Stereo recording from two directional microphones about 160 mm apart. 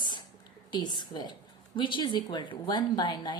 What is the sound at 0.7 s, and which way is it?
A woman's voice, 25° left (ahead or behind).